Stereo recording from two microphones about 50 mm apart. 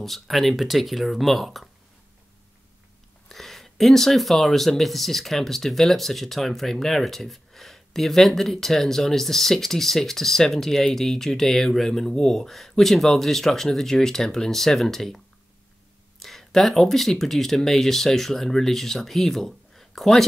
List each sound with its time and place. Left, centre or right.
0.0 s speech: centre
3.3 s speech: centre